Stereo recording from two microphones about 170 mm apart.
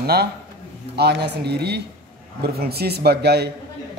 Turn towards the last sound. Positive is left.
turn(degrees=-75)  # may be behind; listen again after turning